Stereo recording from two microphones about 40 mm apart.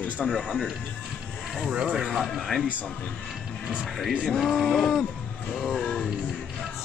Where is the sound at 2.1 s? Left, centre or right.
Centre.